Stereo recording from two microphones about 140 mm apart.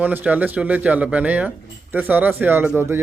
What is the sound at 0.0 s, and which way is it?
Speech, 15° right (ahead or behind).